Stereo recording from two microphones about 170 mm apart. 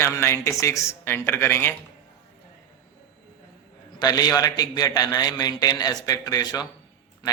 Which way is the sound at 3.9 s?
20° left (ahead or behind).